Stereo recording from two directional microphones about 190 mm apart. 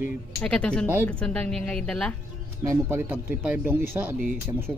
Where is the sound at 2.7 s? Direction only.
10° right (ahead or behind).